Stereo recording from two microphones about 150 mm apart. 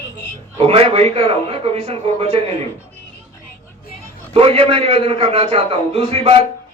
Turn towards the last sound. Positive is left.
turn(degrees=-40)  # may be behind; listen again after turning